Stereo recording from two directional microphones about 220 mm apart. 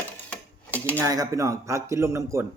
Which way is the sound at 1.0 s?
15° right (ahead or behind).